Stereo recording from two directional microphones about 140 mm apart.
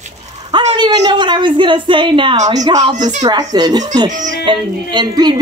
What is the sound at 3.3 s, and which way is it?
Speech, 30° right (ahead or behind).